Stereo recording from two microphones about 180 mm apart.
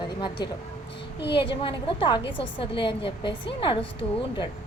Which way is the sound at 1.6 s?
25° left (ahead or behind).